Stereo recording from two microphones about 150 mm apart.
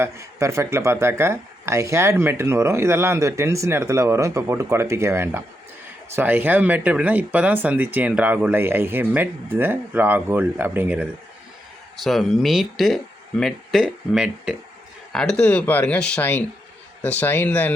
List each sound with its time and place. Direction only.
0.0 s speech: 20° right (ahead or behind); by 17.7 s 10° left (ahead or behind)